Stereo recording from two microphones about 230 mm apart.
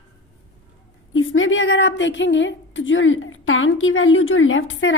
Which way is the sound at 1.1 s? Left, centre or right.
Left.